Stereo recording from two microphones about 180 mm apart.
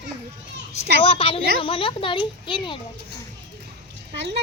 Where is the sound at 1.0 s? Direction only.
30° left (ahead or behind).